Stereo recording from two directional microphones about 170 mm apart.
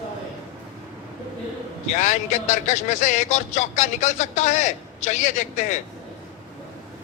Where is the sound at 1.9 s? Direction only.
45° left (ahead or behind).